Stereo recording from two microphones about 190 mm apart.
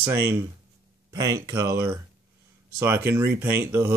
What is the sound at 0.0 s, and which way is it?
Speech, 10° right (ahead or behind).